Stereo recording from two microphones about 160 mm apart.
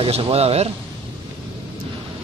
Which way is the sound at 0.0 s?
35° right (ahead or behind).